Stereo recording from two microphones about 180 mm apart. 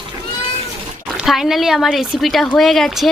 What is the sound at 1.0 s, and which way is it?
Speech, centre (ahead or behind).